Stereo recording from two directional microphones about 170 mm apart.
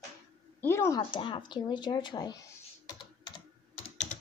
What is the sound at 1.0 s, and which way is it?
Speech, 30° left (ahead or behind).